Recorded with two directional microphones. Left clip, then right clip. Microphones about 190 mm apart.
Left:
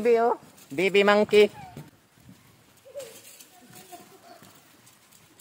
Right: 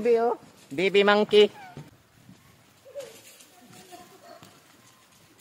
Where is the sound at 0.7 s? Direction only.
5° left (ahead or behind).